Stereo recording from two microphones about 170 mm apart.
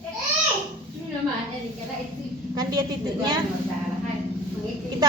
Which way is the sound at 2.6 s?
25° right (ahead or behind).